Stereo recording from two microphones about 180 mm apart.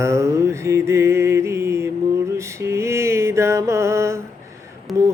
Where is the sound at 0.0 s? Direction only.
15° right (ahead or behind).